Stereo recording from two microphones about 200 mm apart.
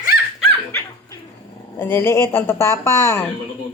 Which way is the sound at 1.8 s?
10° left (ahead or behind).